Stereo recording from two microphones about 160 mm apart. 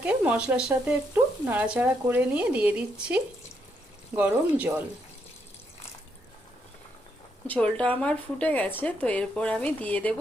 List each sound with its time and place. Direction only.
0.0 s frying: 10° right (ahead or behind)
7.4 s speech: 10° left (ahead or behind)